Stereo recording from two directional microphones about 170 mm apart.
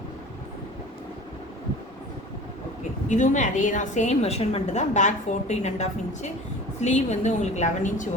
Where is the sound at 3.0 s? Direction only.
45° left (ahead or behind).